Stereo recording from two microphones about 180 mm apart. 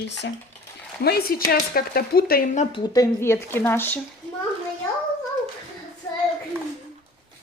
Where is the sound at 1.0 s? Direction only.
60° left (ahead or behind).